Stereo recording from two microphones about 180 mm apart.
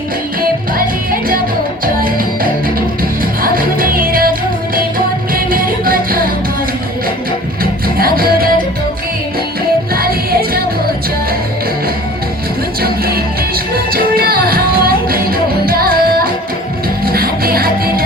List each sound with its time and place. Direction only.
1.8 s music: 50° right (ahead or behind)
7.6 s music: 55° right (ahead or behind)
9.9 s music: 55° right (ahead or behind)
12.8 s music: 60° right (ahead or behind)